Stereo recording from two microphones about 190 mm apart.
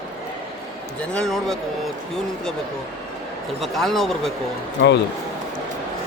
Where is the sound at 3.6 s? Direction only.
Centre (ahead or behind).